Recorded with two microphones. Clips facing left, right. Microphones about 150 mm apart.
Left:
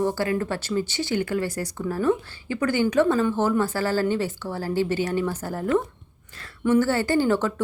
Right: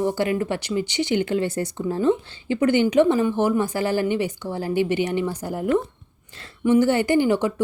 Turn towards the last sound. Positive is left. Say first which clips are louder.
# right 2 dB
turn(degrees=-15)  # may be behind; listen again after turning